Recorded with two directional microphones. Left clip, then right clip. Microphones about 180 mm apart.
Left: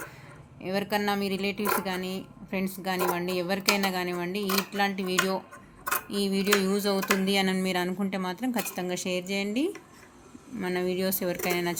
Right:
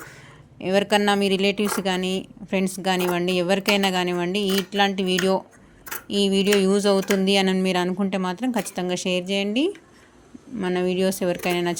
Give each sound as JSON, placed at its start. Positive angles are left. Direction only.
{"t": 0.6, "sound": "speech", "side_deg": -45}